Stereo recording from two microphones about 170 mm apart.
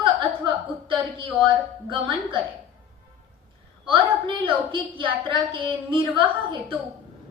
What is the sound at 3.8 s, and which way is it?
A woman's voice, 30° right (ahead or behind).